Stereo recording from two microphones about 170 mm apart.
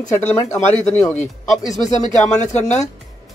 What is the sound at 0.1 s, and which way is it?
Speech, 20° left (ahead or behind).